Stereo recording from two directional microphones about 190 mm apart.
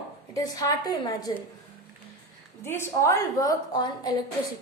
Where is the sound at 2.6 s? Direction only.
15° left (ahead or behind).